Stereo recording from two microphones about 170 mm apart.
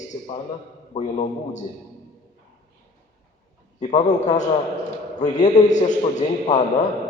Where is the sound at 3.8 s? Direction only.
45° left (ahead or behind).